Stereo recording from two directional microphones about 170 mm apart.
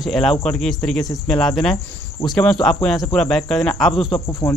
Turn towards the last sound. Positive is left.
turn(degrees=20)  # may be behind; listen again after turning